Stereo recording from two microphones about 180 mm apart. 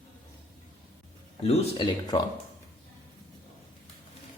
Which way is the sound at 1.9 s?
20° left (ahead or behind).